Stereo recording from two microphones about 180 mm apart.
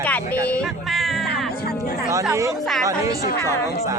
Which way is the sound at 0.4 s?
5° left (ahead or behind).